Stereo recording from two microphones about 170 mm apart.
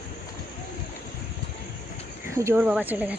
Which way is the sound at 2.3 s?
15° right (ahead or behind).